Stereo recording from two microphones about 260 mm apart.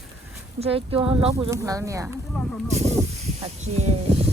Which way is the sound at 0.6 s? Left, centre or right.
Right.